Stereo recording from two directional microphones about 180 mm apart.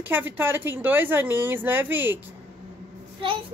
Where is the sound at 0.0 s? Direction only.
10° right (ahead or behind).